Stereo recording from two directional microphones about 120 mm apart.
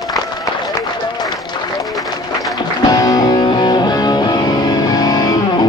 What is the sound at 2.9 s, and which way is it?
Music, 30° left (ahead or behind).